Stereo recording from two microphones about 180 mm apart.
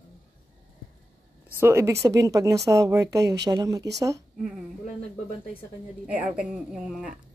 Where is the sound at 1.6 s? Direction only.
15° right (ahead or behind).